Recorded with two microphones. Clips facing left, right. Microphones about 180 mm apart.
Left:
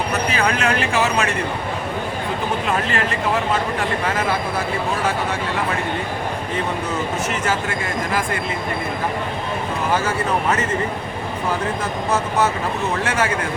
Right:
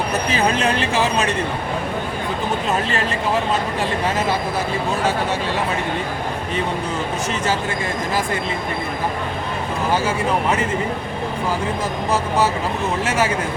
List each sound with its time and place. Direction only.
0.3 s speech: 25° right (ahead or behind)